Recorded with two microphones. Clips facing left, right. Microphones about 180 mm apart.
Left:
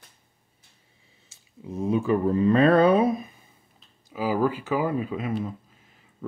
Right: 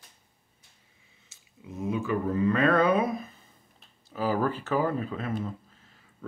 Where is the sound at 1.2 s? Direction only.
30° left (ahead or behind).